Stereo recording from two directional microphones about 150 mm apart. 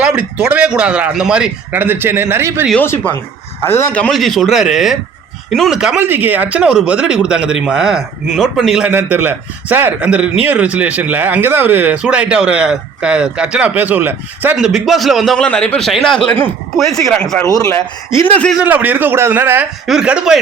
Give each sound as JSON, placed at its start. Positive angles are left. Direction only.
{"t": 0.0, "sound": "speech", "side_deg": -10}
{"t": 2.8, "sound": "speech", "side_deg": 15}
{"t": 8.9, "sound": "speech", "side_deg": -15}
{"t": 17.4, "sound": "speech", "side_deg": 20}
{"t": 18.6, "sound": "speech", "side_deg": -10}